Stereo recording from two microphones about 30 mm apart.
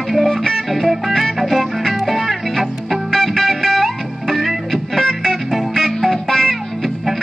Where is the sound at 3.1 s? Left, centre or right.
Centre.